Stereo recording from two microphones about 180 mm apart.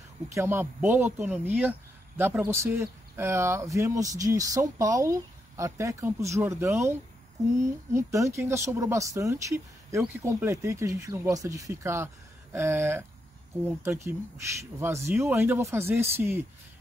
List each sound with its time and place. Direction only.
0.3 s speech: 15° right (ahead or behind)